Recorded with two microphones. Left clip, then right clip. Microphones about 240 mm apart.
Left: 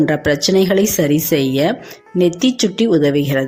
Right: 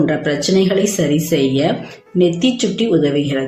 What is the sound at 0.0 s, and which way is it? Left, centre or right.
Speech, left.